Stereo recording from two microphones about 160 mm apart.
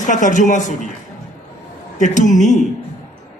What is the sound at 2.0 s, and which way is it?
Speech, 50° left (ahead or behind).